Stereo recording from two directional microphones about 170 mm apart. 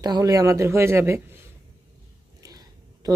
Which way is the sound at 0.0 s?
20° right (ahead or behind).